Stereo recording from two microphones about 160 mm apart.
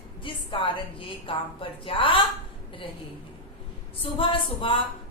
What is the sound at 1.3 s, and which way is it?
Speech, 35° left (ahead or behind).